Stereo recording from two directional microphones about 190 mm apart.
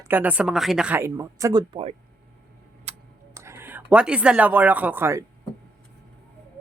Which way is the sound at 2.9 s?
35° right (ahead or behind).